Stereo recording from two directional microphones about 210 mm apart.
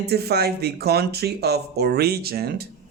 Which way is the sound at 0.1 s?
50° right (ahead or behind).